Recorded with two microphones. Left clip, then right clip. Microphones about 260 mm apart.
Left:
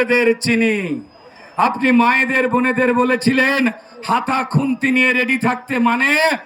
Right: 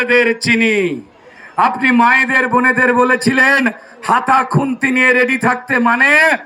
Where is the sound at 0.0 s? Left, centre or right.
Centre.